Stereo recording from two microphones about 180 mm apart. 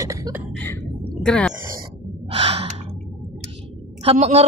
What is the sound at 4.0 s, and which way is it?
Speech, 35° right (ahead or behind).